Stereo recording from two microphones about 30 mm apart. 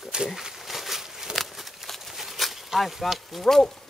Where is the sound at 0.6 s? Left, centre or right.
Centre.